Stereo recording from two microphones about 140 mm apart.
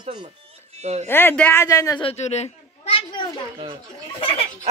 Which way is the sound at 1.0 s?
15° left (ahead or behind).